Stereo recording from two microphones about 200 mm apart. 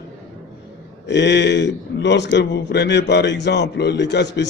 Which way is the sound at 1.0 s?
60° left (ahead or behind).